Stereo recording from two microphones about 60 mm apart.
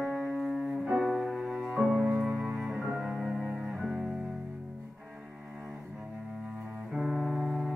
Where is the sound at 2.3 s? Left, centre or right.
Right.